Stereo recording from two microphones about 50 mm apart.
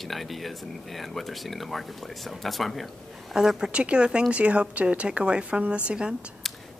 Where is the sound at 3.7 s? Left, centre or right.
Right.